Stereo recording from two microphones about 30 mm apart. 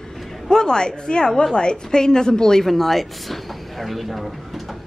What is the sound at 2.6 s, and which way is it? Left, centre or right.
Speech, centre.